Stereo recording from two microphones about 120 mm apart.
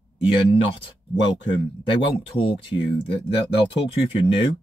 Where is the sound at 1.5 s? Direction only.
45° left (ahead or behind).